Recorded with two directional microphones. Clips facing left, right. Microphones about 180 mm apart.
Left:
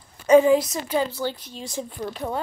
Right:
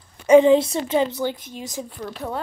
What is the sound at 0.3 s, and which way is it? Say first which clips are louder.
A woman's voice: right 2 dB; 25° right (ahead or behind).